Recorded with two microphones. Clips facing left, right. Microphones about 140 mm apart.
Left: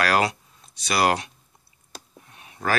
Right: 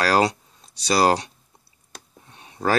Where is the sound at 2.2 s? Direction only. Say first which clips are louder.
Right 4 dB; 30° right (ahead or behind).